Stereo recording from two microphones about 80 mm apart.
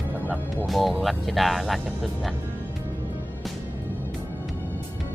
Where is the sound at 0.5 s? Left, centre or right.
Centre.